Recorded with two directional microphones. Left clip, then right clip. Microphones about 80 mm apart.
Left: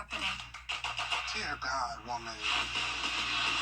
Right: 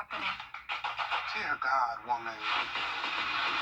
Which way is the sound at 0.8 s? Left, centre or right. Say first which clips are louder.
Right 1 dB; left.